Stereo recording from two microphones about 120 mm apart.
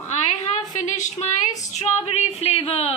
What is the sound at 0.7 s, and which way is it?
Speech, 90° left.